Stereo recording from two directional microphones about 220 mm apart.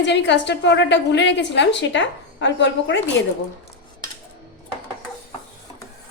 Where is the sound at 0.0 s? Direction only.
50° left (ahead or behind).